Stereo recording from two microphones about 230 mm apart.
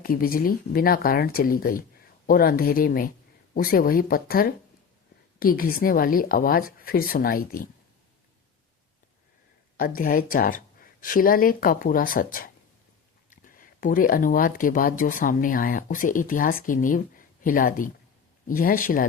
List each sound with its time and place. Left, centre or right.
0.0 s speech: left
9.7 s speech: left